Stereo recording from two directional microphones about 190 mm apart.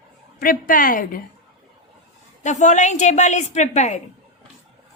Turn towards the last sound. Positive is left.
turn(degrees=40)  # may be behind; listen again after turning